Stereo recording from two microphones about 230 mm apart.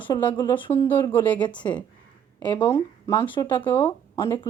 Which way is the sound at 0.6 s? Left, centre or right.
Centre.